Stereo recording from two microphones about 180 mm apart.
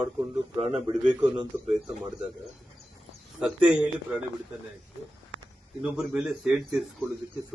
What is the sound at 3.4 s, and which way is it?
Speech, 5° right (ahead or behind).